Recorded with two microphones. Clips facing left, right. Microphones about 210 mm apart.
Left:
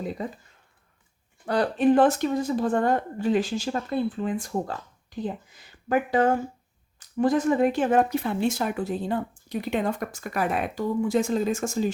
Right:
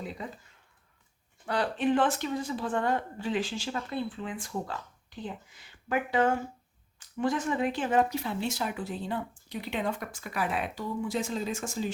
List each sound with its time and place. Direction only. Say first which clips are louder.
1.5 s speech: left 7 dB; 40° left (ahead or behind)